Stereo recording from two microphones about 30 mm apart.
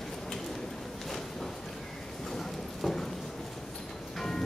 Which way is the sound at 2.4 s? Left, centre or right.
Centre.